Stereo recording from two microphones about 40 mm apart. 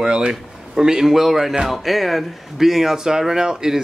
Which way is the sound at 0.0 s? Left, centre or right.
Centre.